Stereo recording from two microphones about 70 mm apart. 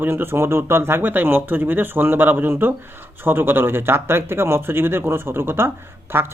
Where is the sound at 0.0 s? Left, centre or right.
Right.